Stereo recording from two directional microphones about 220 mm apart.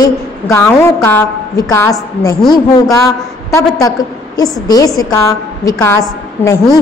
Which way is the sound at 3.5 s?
15° left (ahead or behind).